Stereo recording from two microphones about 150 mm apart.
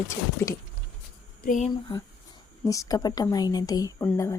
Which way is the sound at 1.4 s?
60° left (ahead or behind).